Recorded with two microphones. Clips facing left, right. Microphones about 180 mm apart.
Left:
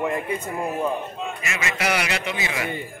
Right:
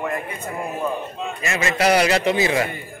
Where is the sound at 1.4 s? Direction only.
35° right (ahead or behind).